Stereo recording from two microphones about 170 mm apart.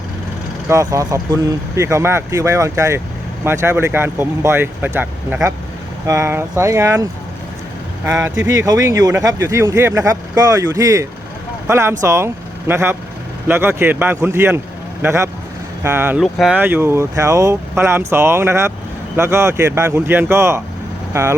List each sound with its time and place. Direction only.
0.7 s speech: 20° right (ahead or behind)
16.2 s speech: centre (ahead or behind)
16.6 s speech: 10° right (ahead or behind)